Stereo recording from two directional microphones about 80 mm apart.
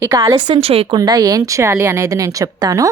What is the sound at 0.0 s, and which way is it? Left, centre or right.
Speech, right.